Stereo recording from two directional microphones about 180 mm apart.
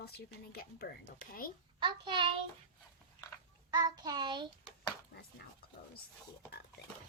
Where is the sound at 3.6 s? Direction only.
20° right (ahead or behind).